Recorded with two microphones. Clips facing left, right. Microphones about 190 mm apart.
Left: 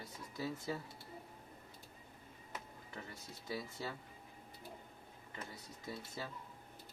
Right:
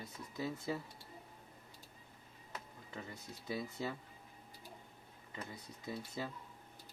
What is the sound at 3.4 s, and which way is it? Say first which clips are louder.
Speech: right 3 dB; 20° right (ahead or behind).